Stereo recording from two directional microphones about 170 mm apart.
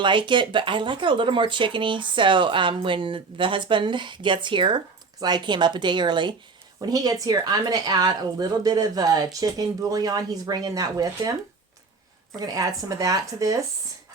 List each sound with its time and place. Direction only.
0.0 s speech: 30° right (ahead or behind)
12.4 s speech: 20° right (ahead or behind)